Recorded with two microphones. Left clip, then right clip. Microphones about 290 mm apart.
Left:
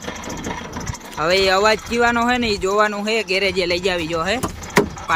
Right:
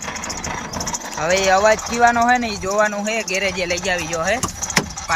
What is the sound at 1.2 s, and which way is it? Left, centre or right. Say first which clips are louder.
Speech: even; centre.